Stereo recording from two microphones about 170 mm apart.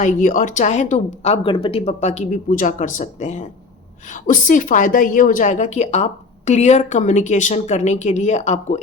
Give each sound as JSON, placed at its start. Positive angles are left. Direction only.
{"t": 0.0, "sound": "a woman's voice", "side_deg": 50}